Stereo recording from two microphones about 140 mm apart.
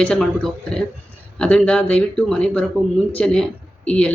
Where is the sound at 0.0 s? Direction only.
5° left (ahead or behind).